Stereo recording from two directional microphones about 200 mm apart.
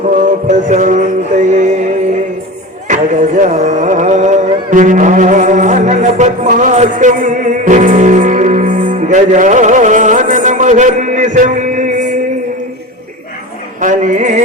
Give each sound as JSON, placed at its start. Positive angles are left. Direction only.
{"t": 0.4, "sound": "music", "side_deg": -35}
{"t": 2.8, "sound": "music", "side_deg": -40}
{"t": 13.8, "sound": "music", "side_deg": -40}